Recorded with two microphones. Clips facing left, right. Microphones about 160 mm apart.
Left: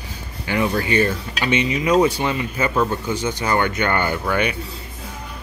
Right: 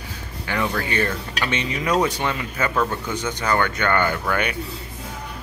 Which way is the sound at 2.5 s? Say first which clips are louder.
Left 1 dB; 15° left (ahead or behind).